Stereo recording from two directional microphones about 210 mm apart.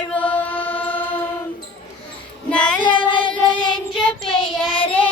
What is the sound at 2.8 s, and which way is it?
Child singing, 25° left (ahead or behind).